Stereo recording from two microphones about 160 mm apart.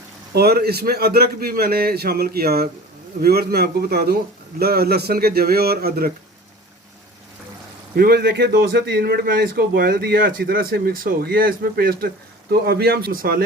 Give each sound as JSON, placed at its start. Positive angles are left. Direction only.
{"t": 0.3, "sound": "a man's voice", "side_deg": -80}
{"t": 7.9, "sound": "a man's voice", "side_deg": -85}